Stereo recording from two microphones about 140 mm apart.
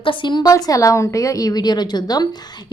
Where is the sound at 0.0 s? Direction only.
35° left (ahead or behind).